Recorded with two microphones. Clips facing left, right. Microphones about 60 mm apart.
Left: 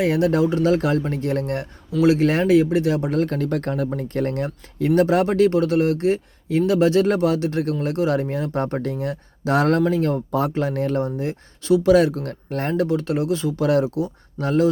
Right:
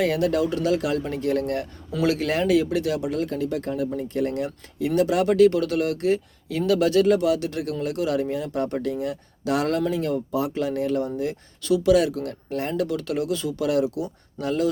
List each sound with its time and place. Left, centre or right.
0.0 s speech: left
11.0 s speech: left
12.8 s speech: left